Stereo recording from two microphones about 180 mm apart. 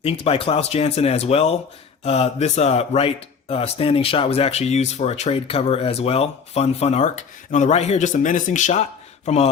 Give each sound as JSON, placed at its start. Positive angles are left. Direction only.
{"t": 0.0, "sound": "speech", "side_deg": 30}